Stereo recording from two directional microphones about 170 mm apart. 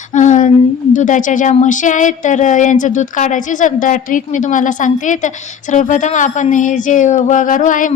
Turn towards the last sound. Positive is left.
turn(degrees=50)  # may be behind; listen again after turning